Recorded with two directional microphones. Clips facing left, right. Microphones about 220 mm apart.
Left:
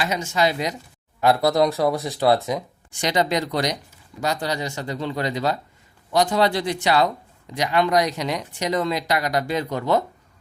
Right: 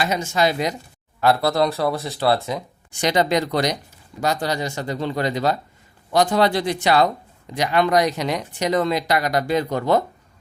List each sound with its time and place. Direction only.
0.0 s speech: 45° right (ahead or behind)
1.2 s speech: 15° left (ahead or behind)
3.0 s speech: 55° right (ahead or behind)